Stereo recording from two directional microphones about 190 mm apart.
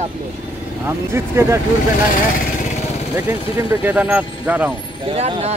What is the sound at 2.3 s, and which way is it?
Vehicle, 40° left (ahead or behind).